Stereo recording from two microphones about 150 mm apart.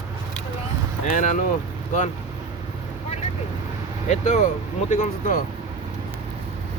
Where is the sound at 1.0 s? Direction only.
55° left (ahead or behind).